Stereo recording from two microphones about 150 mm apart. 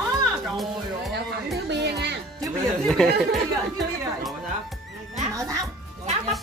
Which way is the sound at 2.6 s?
Centre (ahead or behind).